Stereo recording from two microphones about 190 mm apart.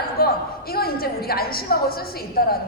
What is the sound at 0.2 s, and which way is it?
A woman's voice, 55° left (ahead or behind).